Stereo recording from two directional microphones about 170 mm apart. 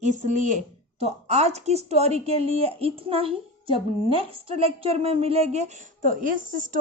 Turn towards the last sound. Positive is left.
turn(degrees=-50)  # may be behind; listen again after turning